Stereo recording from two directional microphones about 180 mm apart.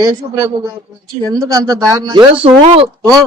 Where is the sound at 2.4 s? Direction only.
35° right (ahead or behind).